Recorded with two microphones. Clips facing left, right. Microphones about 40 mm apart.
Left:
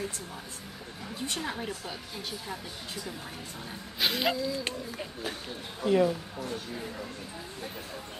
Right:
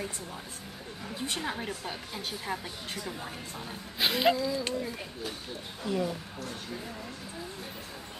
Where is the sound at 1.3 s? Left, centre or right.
Centre.